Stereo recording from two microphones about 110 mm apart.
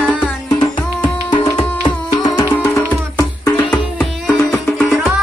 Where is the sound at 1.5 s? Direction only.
40° left (ahead or behind).